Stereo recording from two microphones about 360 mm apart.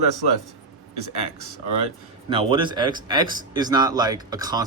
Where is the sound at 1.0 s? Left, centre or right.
Right.